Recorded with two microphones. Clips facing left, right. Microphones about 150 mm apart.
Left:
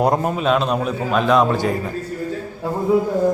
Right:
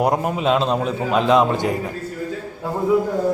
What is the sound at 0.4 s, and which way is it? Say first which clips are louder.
A man's voice: right 2 dB; 25° right (ahead or behind).